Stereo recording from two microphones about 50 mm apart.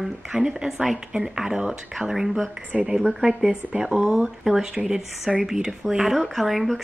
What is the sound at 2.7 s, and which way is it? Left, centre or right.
A woman's voice, centre.